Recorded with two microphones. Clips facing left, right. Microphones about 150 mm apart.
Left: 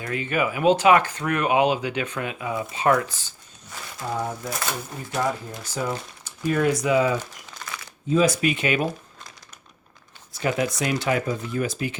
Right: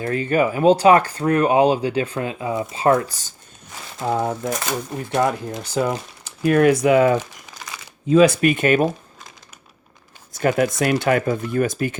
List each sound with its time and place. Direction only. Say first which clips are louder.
0.0 s speech: right 6 dB; 40° right (ahead or behind)
4.1 s speech: right 7 dB; 55° right (ahead or behind)
5.1 s speech: right 6 dB; 70° right (ahead or behind)
7.6 s shuffling cards: even; 10° right (ahead or behind)
8.1 s speech: right 6 dB; 60° right (ahead or behind)
10.4 s speech: right 6 dB; 50° right (ahead or behind)